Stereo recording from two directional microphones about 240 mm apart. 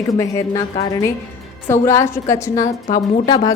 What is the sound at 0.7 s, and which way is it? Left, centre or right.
Speech, left.